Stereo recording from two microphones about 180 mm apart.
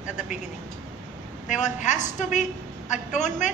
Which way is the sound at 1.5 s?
40° left (ahead or behind).